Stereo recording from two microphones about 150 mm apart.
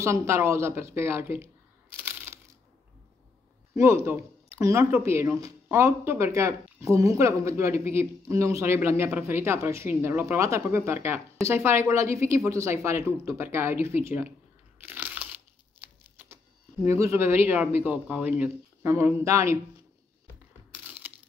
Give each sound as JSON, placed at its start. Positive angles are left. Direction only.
{"t": 0.0, "sound": "speech", "side_deg": -20}
{"t": 2.0, "sound": "crushing", "side_deg": -15}
{"t": 3.7, "sound": "speech", "side_deg": -20}
{"t": 14.8, "sound": "crunch", "side_deg": -10}
{"t": 16.8, "sound": "speech", "side_deg": -20}
{"t": 20.7, "sound": "crushing", "side_deg": -10}